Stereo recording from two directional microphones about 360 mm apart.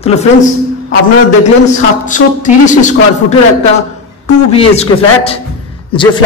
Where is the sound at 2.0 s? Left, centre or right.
Left.